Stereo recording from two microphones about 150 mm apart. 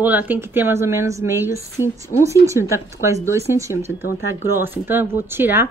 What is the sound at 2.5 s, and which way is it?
Speech, 20° right (ahead or behind).